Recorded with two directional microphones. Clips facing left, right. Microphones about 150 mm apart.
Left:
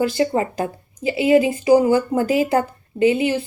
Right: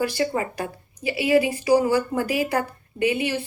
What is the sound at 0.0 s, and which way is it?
A woman's voice, 25° left (ahead or behind).